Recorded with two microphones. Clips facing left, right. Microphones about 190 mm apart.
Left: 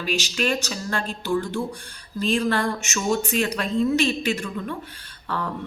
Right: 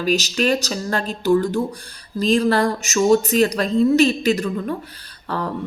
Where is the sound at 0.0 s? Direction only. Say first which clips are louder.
Right 6 dB; 40° right (ahead or behind).